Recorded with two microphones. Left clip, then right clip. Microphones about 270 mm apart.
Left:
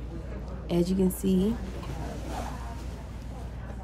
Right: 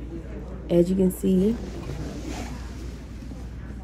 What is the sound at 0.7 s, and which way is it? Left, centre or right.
Speech, centre.